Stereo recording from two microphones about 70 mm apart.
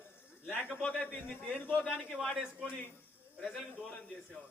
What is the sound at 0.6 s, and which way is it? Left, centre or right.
A man's voice, left.